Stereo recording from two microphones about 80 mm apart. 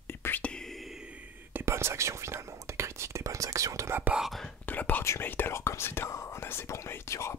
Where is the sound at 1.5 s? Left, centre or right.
Right.